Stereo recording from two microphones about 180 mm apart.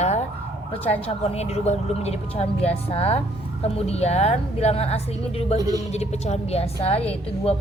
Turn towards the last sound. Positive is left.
turn(degrees=35)  # may be behind; listen again after turning